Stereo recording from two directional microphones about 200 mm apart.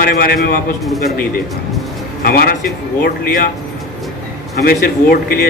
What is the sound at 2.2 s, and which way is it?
Speech, 50° left (ahead or behind).